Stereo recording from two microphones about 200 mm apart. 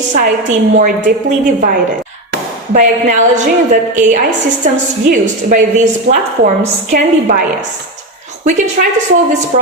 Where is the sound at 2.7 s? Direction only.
40° right (ahead or behind).